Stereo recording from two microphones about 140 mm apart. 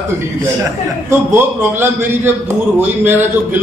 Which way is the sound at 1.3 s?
15° right (ahead or behind).